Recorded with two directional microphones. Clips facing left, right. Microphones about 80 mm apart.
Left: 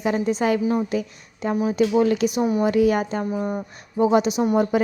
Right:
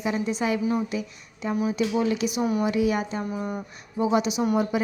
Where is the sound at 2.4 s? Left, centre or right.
Left.